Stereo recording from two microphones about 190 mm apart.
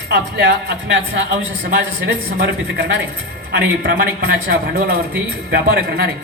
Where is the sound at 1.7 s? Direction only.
60° right (ahead or behind).